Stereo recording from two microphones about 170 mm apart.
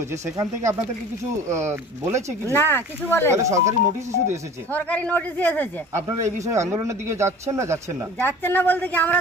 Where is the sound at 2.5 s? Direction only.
15° left (ahead or behind).